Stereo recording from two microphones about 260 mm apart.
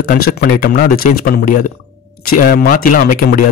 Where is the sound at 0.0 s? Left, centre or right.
Left.